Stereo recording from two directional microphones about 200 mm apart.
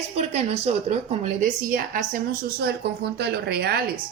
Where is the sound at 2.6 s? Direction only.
55° right (ahead or behind).